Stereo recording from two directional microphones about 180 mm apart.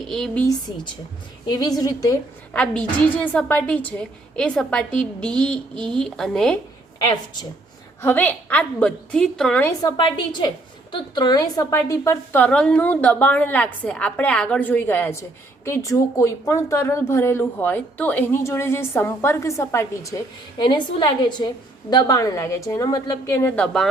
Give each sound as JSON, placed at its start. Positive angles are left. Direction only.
{"t": 0.1, "sound": "a woman's voice", "side_deg": 5}
{"t": 1.5, "sound": "a woman's voice", "side_deg": 20}
{"t": 2.5, "sound": "a woman's voice", "side_deg": 5}
{"t": 8.0, "sound": "speech", "side_deg": 10}
{"t": 9.8, "sound": "a woman's voice", "side_deg": 25}